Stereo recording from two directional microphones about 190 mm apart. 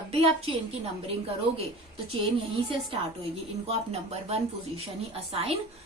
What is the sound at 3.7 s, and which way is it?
A woman's voice, 35° right (ahead or behind).